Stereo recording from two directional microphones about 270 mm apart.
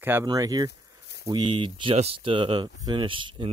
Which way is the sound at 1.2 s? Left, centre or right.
Centre.